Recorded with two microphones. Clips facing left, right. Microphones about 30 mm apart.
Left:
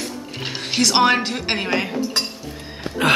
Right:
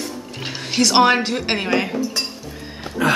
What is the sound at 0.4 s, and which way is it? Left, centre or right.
Music, centre.